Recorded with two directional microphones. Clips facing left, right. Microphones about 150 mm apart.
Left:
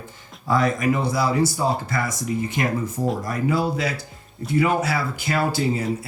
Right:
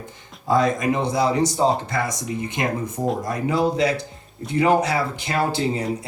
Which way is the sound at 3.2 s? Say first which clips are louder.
Right 3 dB; 20° right (ahead or behind).